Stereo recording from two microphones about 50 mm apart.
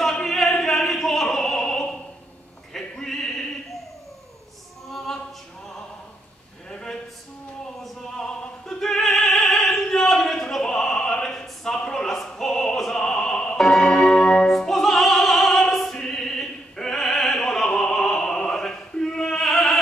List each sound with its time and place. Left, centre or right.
0.2 s opera: centre
2.7 s a sound: centre
4.8 s opera: centre
6.7 s a sound: centre
8.2 s opera: centre
13.0 s opera: centre
13.6 s music: centre